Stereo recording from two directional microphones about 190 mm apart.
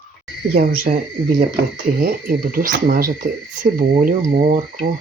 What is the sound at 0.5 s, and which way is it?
Speech, 45° right (ahead or behind).